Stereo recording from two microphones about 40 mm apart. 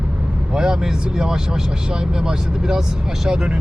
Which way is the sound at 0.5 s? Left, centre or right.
Centre.